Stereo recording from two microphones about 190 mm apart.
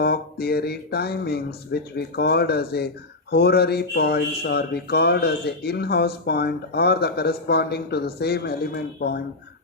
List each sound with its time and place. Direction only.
0.0 s speech: 55° left (ahead or behind)